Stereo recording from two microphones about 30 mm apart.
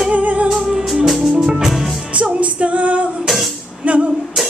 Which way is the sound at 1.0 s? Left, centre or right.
Centre.